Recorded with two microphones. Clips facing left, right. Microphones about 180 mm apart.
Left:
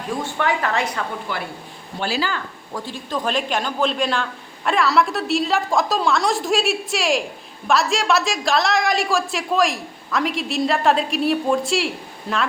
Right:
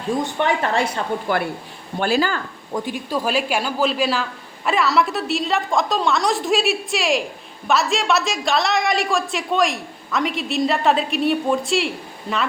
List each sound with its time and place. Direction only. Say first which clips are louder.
0.2 s speech: left 1 dB; 20° right (ahead or behind)
1.3 s speech: right 7 dB; 45° right (ahead or behind)
2.7 s speech: right 3 dB; 15° right (ahead or behind); by 12.4 s centre (ahead or behind)